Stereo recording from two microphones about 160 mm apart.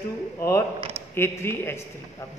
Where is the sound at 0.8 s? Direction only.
40° right (ahead or behind).